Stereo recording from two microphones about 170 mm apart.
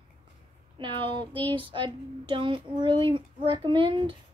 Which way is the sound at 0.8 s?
30° right (ahead or behind).